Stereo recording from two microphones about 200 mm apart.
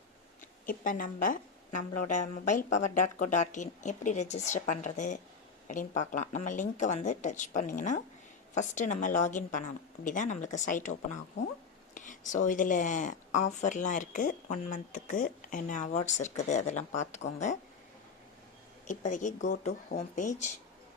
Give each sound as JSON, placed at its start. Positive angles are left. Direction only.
{"t": 0.6, "sound": "a woman's voice", "side_deg": 45}
{"t": 18.9, "sound": "a woman's voice", "side_deg": 40}